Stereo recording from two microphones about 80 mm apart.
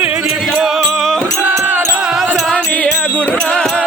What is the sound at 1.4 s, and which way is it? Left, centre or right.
Music, right.